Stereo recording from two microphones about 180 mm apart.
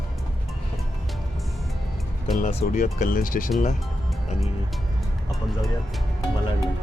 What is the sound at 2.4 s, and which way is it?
Speech, 45° left (ahead or behind).